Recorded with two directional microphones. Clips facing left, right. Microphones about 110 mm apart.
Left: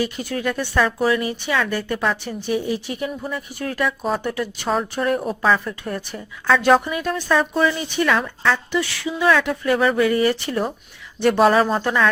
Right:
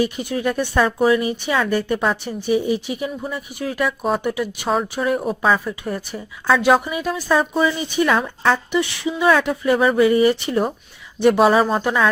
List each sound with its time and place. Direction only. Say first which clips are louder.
0.0 s speech: right 3 dB; 20° right (ahead or behind)